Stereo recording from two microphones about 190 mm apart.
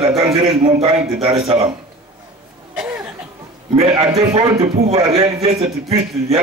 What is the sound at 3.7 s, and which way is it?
A man's voice, 30° right (ahead or behind).